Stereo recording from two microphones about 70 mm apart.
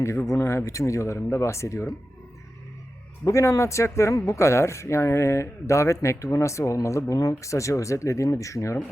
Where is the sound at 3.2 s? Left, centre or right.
Left.